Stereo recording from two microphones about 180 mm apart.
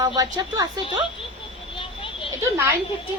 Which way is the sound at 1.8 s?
30° left (ahead or behind).